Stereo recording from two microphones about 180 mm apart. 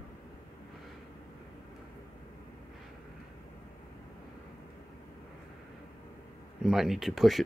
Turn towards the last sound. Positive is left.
turn(degrees=0)  # may be behind; listen again after turning